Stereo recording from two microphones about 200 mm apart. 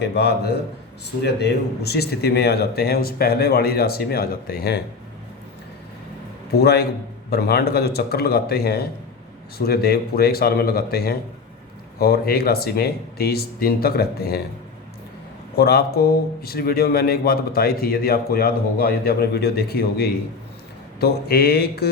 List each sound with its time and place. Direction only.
0.0 s a man's voice: 55° left (ahead or behind)
6.6 s a man's voice: 55° left (ahead or behind)
15.5 s a man's voice: 50° left (ahead or behind)